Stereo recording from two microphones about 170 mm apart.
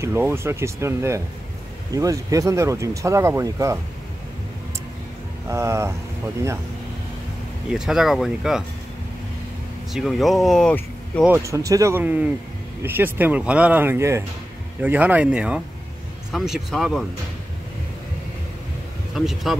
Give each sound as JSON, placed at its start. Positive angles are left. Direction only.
{"t": 0.0, "sound": "speech", "side_deg": -15}
{"t": 5.5, "sound": "speech", "side_deg": -15}
{"t": 7.7, "sound": "speech", "side_deg": -5}
{"t": 9.9, "sound": "speech", "side_deg": 0}
{"t": 11.2, "sound": "speech", "side_deg": -15}
{"t": 19.1, "sound": "speech", "side_deg": 0}